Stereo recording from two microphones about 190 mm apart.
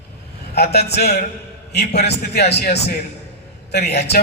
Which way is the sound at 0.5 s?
60° left (ahead or behind).